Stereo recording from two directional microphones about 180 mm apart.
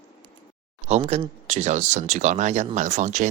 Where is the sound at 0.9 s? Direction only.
35° right (ahead or behind).